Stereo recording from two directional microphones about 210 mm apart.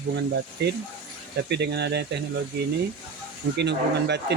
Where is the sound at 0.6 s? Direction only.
55° right (ahead or behind).